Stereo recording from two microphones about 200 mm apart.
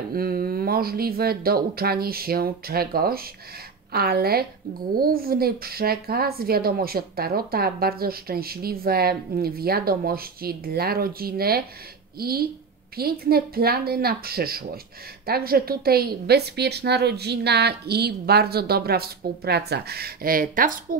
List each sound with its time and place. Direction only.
0.1 s a woman's voice: 50° right (ahead or behind)